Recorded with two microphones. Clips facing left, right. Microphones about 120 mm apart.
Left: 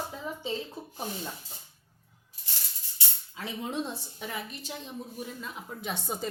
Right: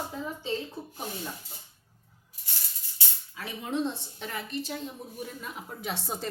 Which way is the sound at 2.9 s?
20° left (ahead or behind).